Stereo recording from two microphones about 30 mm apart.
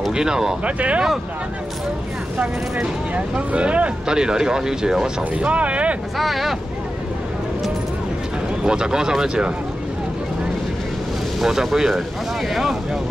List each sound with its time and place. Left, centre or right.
0.1 s speech: right
0.7 s speech: right
3.2 s speech: right
4.1 s speech: right
5.4 s speech: right
6.1 s speech: centre
8.6 s speech: right
11.4 s speech: centre